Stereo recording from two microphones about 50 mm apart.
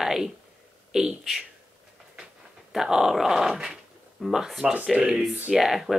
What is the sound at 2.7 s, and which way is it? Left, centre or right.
Speech, centre.